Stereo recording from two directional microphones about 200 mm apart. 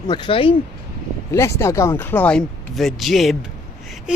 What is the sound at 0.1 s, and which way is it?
Speech, 25° left (ahead or behind).